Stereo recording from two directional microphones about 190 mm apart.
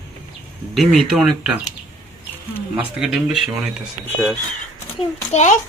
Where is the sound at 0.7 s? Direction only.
Centre (ahead or behind).